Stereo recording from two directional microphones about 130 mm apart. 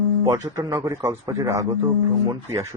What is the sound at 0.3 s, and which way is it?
A man's voice, 25° right (ahead or behind).